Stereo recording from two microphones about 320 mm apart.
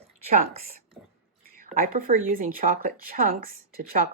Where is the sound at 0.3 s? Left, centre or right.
Right.